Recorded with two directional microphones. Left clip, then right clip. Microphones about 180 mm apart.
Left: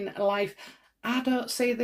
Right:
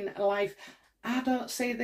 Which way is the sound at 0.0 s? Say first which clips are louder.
Left 2 dB; 35° left (ahead or behind).